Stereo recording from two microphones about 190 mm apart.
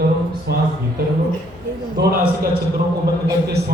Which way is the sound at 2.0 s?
50° right (ahead or behind).